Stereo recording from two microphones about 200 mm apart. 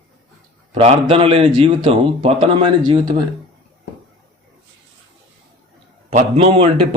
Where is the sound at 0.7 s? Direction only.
30° right (ahead or behind).